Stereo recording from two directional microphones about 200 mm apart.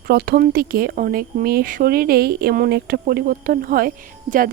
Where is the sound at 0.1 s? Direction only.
50° right (ahead or behind).